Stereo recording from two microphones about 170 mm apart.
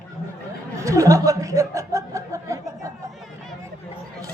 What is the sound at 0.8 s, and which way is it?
Chuckle, 20° right (ahead or behind).